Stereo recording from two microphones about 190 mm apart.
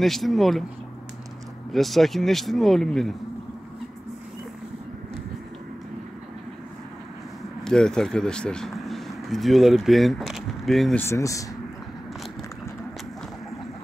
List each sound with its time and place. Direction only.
0.0 s a man's voice: centre (ahead or behind)
1.7 s a man's voice: centre (ahead or behind)
7.6 s speech: 5° left (ahead or behind)
11.1 s speech: 15° left (ahead or behind)